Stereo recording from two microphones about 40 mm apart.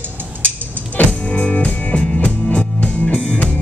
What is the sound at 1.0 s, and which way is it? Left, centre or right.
Music, left.